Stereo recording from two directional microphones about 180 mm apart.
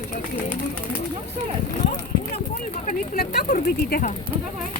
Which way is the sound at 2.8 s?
45° left (ahead or behind).